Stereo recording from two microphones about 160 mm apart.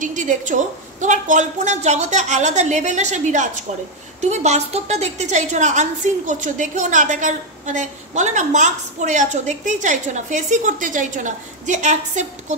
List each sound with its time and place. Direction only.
0.0 s a woman's voice: 50° right (ahead or behind)